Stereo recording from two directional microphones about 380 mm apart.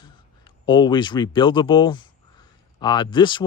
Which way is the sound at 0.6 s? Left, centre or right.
Centre.